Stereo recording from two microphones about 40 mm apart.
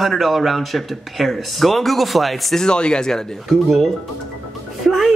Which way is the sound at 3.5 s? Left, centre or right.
Centre.